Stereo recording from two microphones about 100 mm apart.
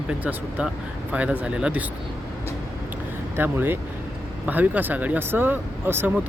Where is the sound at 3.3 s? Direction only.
20° right (ahead or behind).